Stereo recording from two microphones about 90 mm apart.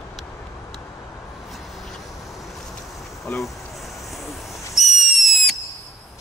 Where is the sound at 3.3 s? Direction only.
15° left (ahead or behind).